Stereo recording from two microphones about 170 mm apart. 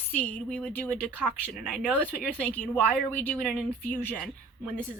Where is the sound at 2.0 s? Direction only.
10° left (ahead or behind).